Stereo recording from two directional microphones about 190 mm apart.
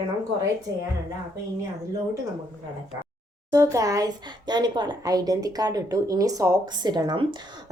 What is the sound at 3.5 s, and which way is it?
A woman's voice, 15° right (ahead or behind).